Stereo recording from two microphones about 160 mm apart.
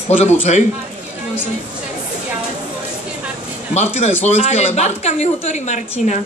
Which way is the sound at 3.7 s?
45° left (ahead or behind).